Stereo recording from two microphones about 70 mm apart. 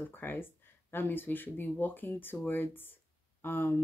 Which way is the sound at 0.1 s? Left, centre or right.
Left.